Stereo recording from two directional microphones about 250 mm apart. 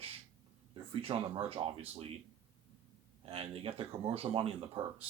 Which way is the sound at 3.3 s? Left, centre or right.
Right.